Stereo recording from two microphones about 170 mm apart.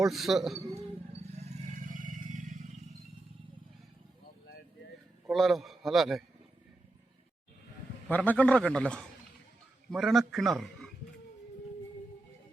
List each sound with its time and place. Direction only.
0.0 s a man's voice: centre (ahead or behind)
1.4 s vehicle: 45° right (ahead or behind)
5.3 s a man's voice: centre (ahead or behind)
8.0 s a man's voice: 10° left (ahead or behind)